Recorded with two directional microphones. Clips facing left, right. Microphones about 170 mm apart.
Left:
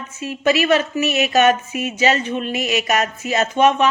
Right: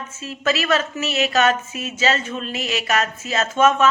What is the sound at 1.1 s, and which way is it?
Speech, 35° right (ahead or behind).